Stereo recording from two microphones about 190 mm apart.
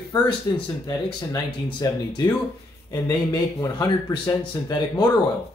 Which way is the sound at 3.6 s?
20° left (ahead or behind).